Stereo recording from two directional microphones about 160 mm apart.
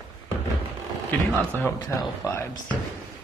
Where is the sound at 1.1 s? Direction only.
10° left (ahead or behind).